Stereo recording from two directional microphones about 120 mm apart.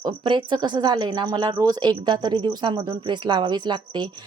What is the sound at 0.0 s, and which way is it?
Speech, 40° right (ahead or behind).